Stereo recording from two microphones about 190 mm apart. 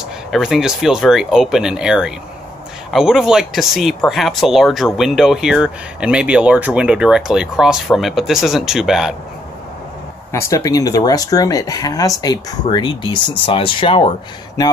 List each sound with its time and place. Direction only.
0.3 s speech: centre (ahead or behind)
10.3 s speech: 15° left (ahead or behind)